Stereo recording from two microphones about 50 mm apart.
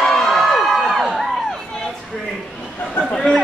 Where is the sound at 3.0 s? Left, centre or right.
Left.